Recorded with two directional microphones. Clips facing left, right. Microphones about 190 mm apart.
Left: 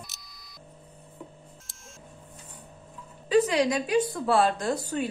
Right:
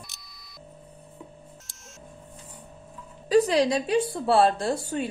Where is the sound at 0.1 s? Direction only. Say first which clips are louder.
Even; centre (ahead or behind).